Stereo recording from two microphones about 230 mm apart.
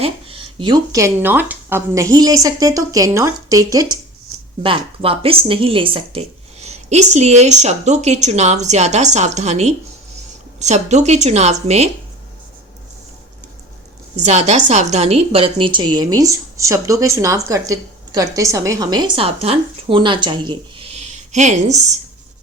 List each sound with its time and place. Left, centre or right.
0.0 s a woman's voice: right
14.2 s a woman's voice: right